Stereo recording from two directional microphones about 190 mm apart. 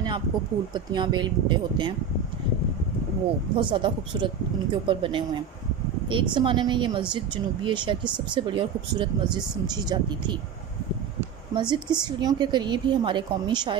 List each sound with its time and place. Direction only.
0.7 s a woman's voice: 25° right (ahead or behind)
3.5 s a woman's voice: 25° right (ahead or behind)
11.7 s a woman's voice: 20° right (ahead or behind)